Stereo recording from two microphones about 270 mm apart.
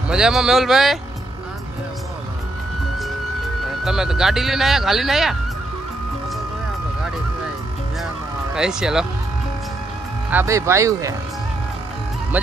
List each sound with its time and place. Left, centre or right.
0.1 s speech: centre
3.8 s speech: centre
8.5 s speech: centre
10.3 s speech: centre